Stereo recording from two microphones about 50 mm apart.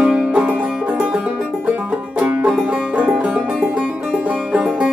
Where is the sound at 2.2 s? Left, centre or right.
Right.